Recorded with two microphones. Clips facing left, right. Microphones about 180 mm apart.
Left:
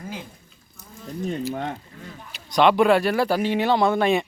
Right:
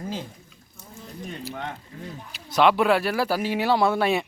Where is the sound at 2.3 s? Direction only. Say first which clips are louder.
Left 2 dB; 5° right (ahead or behind).